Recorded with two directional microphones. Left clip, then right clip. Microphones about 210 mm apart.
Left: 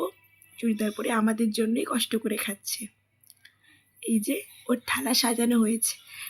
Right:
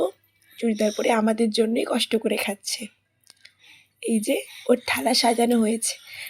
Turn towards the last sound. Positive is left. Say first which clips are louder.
# right 4 dB
turn(degrees=-15)  # may be behind; listen again after turning